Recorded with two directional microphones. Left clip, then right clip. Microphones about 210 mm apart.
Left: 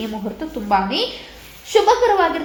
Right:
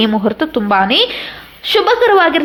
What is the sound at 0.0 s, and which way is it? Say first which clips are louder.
A woman's voice: right 13 dB; 45° right (ahead or behind).